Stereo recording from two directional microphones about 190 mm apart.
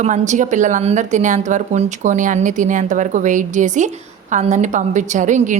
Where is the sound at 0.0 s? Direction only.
40° right (ahead or behind).